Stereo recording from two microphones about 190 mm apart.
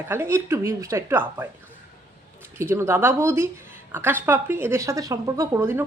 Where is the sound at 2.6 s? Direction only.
15° right (ahead or behind).